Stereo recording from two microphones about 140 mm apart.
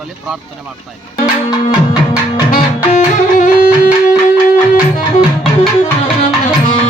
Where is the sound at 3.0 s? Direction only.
70° left (ahead or behind).